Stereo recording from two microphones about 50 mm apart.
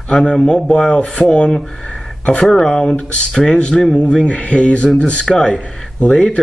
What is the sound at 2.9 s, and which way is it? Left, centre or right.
Speech, left.